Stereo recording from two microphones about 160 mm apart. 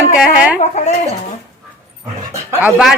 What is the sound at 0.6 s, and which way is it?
Speech, 50° left (ahead or behind).